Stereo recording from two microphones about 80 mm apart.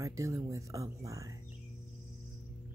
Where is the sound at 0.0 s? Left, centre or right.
Right.